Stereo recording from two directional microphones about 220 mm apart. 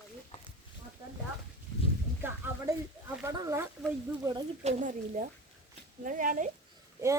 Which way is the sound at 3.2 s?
15° right (ahead or behind).